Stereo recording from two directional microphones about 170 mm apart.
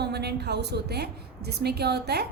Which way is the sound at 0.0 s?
75° right (ahead or behind).